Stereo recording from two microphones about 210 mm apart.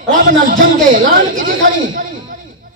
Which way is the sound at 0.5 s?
40° right (ahead or behind).